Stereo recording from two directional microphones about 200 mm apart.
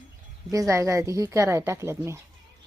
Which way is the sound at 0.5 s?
15° right (ahead or behind).